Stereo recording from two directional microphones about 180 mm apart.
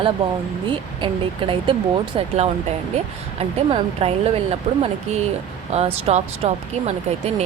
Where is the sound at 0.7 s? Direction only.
30° right (ahead or behind).